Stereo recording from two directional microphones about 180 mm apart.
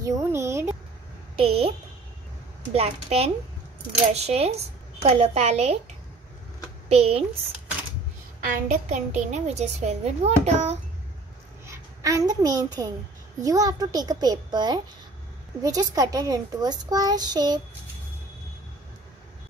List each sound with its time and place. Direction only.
0.0 s a sound: 15° right (ahead or behind)
1.3 s a woman's voice: 30° right (ahead or behind)
2.7 s a child's voice: 35° right (ahead or behind)
6.9 s a child's voice: 35° right (ahead or behind)
8.5 s a child's voice: 40° right (ahead or behind)
11.6 s a child's voice: 15° right (ahead or behind)